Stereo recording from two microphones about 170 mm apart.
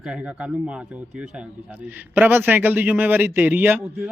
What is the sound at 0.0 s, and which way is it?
A man's voice, 5° right (ahead or behind).